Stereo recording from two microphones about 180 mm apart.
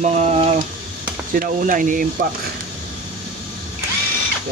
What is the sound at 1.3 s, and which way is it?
Speech, 50° right (ahead or behind).